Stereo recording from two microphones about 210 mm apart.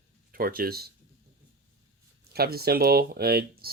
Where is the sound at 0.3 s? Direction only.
45° right (ahead or behind).